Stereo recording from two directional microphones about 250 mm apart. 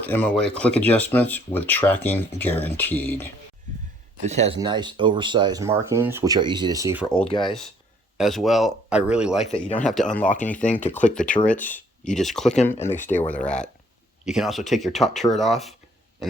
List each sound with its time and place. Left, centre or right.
0.0 s speech: centre
4.3 s speech: right; by 7.1 s centre
7.3 s speech: centre
8.2 s speech: centre